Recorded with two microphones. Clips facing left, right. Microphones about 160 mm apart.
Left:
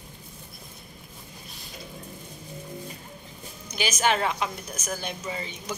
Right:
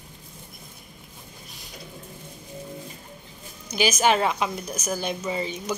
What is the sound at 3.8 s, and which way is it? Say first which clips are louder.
A woman's voice: right 4 dB; 15° right (ahead or behind).